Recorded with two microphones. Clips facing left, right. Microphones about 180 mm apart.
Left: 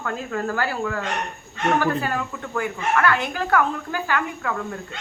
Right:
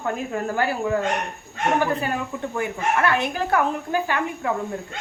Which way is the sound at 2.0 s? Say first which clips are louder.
Right 1 dB; 20° right (ahead or behind).